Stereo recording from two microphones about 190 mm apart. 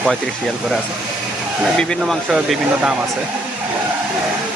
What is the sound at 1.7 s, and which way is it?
Speech, centre (ahead or behind).